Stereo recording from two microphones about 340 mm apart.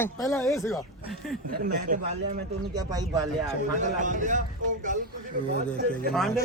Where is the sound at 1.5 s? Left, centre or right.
Right.